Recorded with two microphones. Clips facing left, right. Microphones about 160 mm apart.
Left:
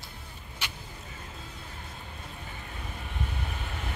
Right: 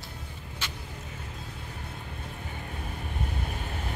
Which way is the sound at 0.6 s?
10° left (ahead or behind).